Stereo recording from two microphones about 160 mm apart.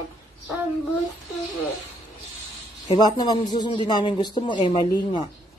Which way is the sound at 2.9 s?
25° left (ahead or behind).